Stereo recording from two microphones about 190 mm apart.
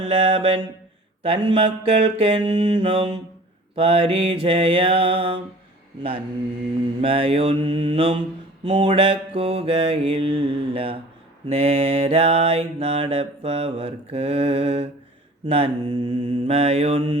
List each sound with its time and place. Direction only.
0.0 s mantra: 30° right (ahead or behind)